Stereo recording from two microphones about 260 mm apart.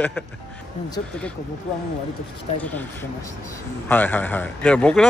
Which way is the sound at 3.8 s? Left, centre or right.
Centre.